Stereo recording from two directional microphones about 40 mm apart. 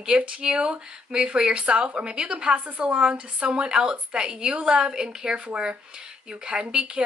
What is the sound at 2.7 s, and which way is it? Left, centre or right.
Speech, right.